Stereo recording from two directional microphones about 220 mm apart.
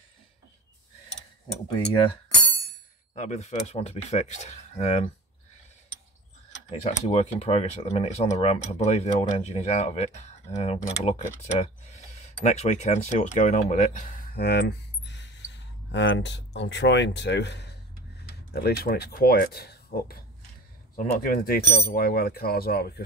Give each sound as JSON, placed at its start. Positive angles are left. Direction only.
{"t": 3.2, "sound": "speech", "side_deg": 30}
{"t": 6.7, "sound": "speech", "side_deg": 25}